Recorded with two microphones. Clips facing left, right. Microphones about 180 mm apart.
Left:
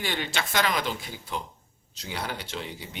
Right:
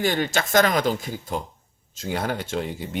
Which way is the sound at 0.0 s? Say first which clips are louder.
Right 8 dB; 45° right (ahead or behind).